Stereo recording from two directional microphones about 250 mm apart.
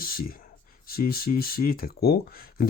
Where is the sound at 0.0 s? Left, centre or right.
Left.